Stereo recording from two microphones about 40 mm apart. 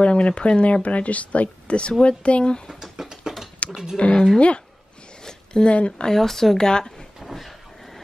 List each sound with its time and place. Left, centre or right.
0.0 s speech: left
0.8 s speech: left
2.7 s a sound: centre
3.9 s speech: left
5.2 s a sound: centre
5.8 s speech: left
6.0 s speech: centre
6.7 s speech: centre
7.2 s vehicle: centre